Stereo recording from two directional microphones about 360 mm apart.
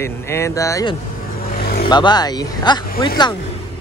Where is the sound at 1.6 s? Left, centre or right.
Left.